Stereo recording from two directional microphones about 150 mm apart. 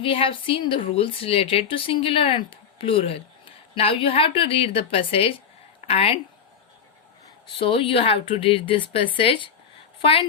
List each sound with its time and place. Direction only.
0.0 s a woman's voice: 35° left (ahead or behind)
7.6 s a woman's voice: 35° left (ahead or behind)